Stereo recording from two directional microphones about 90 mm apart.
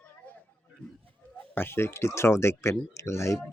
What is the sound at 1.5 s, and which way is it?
Speech, 25° left (ahead or behind).